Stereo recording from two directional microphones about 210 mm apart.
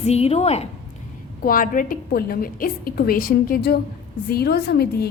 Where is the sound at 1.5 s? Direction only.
40° left (ahead or behind).